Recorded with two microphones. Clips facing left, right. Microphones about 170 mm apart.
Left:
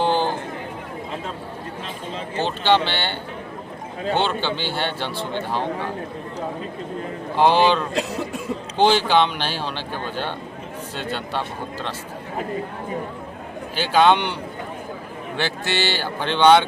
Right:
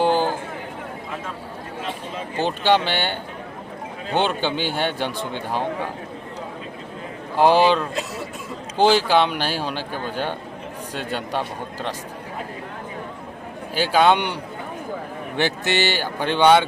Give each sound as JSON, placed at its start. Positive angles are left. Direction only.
{"t": 0.0, "sound": "a sound", "side_deg": -5}
{"t": 2.3, "sound": "a man's voice", "side_deg": -15}
{"t": 7.6, "sound": "a man's voice", "side_deg": -5}
{"t": 13.7, "sound": "a man's voice", "side_deg": -10}
{"t": 15.4, "sound": "a man's voice", "side_deg": -15}